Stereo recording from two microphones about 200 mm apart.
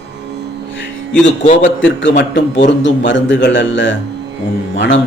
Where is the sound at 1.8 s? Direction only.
60° left (ahead or behind).